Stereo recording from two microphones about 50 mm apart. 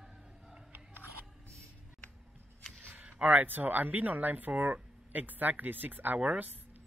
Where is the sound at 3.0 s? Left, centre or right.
Right.